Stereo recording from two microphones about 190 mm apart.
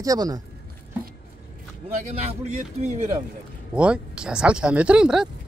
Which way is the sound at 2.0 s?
35° right (ahead or behind).